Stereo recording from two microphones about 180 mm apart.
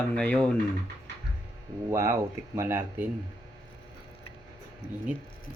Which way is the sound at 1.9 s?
15° right (ahead or behind).